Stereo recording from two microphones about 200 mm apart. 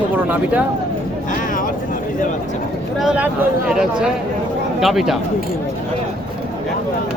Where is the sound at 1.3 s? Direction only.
40° left (ahead or behind).